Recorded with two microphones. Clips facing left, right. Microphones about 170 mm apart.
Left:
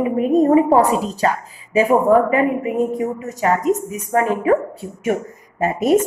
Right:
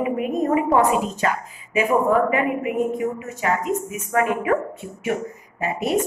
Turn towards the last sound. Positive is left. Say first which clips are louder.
# left 7 dB
turn(degrees=45)  # may be behind; listen again after turning